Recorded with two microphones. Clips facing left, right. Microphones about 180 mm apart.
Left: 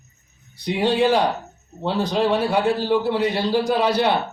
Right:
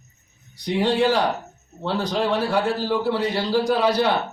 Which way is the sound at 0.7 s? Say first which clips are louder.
Left 1 dB; 15° left (ahead or behind).